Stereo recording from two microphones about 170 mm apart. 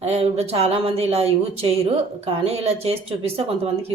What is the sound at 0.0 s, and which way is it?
Speech, 40° right (ahead or behind).